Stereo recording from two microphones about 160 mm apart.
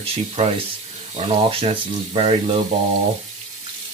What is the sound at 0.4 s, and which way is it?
Speech, 45° right (ahead or behind).